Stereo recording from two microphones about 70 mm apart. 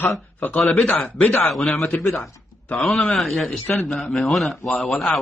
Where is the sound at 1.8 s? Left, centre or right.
Centre.